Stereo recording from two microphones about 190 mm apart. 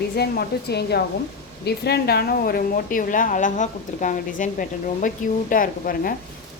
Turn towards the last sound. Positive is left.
turn(degrees=50)  # may be behind; listen again after turning